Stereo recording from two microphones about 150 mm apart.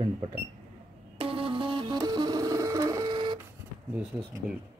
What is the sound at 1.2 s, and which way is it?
Music, 35° right (ahead or behind).